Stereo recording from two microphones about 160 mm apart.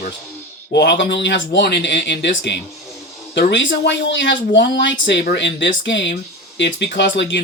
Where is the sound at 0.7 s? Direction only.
90° left.